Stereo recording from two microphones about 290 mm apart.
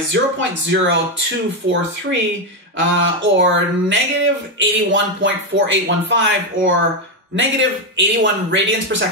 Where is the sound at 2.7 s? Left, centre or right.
Right.